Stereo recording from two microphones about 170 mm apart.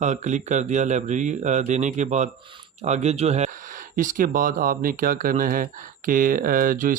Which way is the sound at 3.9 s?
50° right (ahead or behind).